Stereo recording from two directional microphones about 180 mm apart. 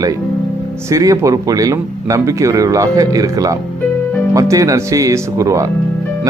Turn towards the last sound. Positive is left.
turn(degrees=-15)  # may be behind; listen again after turning